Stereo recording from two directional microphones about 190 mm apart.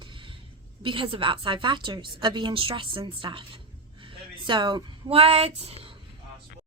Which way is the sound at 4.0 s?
25° right (ahead or behind).